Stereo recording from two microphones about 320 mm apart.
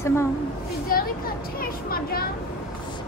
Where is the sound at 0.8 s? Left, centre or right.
Left.